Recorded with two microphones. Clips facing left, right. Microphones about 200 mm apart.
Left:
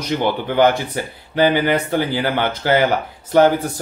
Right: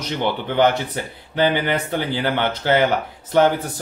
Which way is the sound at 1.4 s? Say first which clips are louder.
Left 3 dB; 45° left (ahead or behind).